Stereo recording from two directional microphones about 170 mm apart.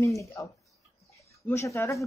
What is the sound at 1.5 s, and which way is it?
Speech, 15° left (ahead or behind).